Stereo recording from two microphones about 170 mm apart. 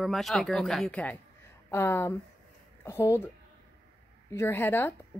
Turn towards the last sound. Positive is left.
turn(degrees=10)  # may be behind; listen again after turning